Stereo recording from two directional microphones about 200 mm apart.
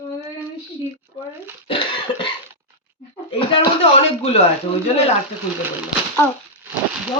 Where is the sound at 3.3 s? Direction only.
25° left (ahead or behind).